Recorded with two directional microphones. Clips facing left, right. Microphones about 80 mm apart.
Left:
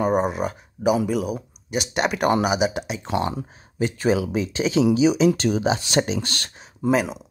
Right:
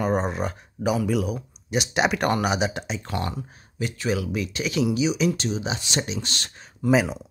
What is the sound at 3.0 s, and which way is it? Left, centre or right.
Speech, centre.